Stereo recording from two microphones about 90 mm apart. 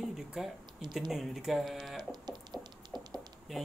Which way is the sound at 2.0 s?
55° right (ahead or behind).